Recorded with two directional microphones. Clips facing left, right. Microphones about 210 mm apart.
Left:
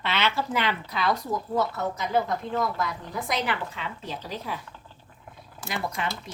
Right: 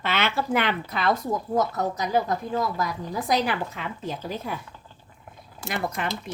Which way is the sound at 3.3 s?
45° right (ahead or behind).